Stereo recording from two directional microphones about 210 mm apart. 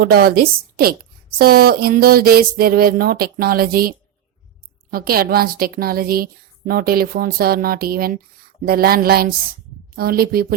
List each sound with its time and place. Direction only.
0.0 s a woman's voice: 45° right (ahead or behind)